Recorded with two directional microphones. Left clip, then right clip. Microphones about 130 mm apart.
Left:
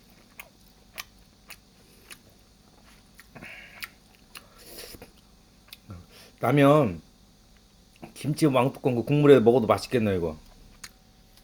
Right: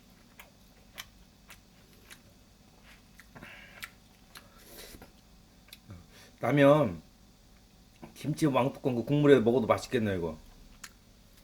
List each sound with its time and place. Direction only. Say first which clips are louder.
3.3 s tick-tock: left 6 dB; 25° left (ahead or behind)
4.3 s biting: left 5 dB; 25° left (ahead or behind)
5.7 s tick-tock: left 5 dB; 25° left (ahead or behind)
8.0 s speech: left 6 dB; 25° left (ahead or behind)
10.8 s a sound: left 4 dB; 5° left (ahead or behind)